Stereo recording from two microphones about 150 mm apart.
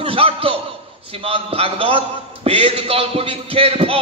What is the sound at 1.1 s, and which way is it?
A man's voice, 40° right (ahead or behind).